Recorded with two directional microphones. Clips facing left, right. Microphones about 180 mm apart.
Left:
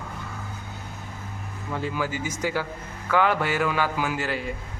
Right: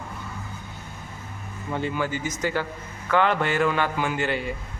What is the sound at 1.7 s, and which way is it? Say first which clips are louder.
A man's voice: right 2 dB; centre (ahead or behind).